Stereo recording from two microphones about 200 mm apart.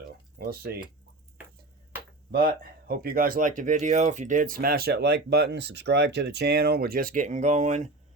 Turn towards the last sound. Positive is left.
turn(degrees=-35)  # may be behind; listen again after turning